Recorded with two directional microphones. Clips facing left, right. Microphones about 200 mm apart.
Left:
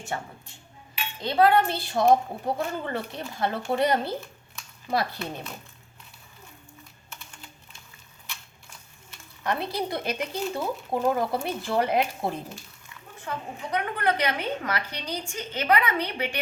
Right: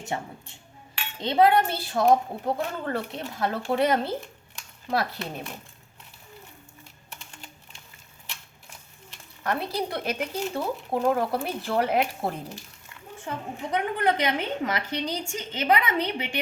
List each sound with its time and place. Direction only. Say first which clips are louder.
0.1 s a woman's voice: right 2 dB; 20° right (ahead or behind); by 5.4 s centre (ahead or behind)
9.4 s a woman's voice: even; centre (ahead or behind)
13.2 s a woman's voice: right 1 dB; 25° right (ahead or behind)